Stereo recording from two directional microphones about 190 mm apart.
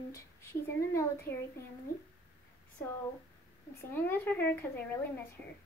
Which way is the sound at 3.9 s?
10° left (ahead or behind).